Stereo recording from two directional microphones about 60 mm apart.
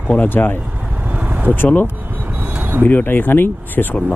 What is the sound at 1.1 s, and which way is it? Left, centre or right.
Vehicle, right.